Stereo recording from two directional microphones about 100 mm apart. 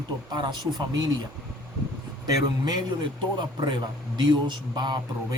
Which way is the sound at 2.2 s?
40° right (ahead or behind).